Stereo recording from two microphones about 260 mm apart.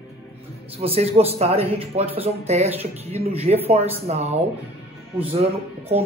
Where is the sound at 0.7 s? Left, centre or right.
Right.